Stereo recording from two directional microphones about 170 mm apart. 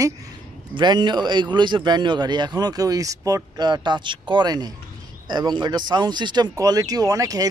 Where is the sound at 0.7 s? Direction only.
25° right (ahead or behind).